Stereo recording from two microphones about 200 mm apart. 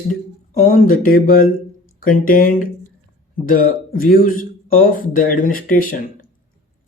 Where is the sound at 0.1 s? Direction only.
40° left (ahead or behind).